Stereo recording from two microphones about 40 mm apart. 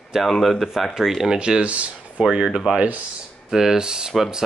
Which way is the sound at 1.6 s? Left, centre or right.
Right.